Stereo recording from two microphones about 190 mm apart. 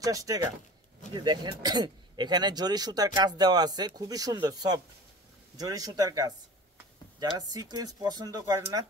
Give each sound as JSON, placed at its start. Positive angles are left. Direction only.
{"t": 0.0, "sound": "speech", "side_deg": -20}